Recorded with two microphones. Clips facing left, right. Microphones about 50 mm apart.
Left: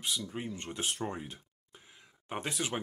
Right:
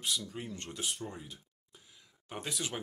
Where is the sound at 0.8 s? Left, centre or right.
Left.